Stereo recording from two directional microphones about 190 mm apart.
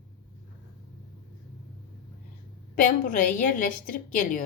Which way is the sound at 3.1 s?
45° left (ahead or behind).